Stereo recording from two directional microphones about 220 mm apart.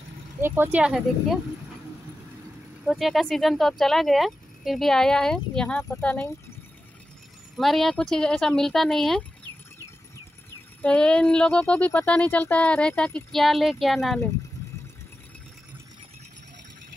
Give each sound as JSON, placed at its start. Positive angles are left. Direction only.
{"t": 0.4, "sound": "speech", "side_deg": -10}
{"t": 2.8, "sound": "speech", "side_deg": 0}
{"t": 7.5, "sound": "speech", "side_deg": 0}
{"t": 10.8, "sound": "speech", "side_deg": 5}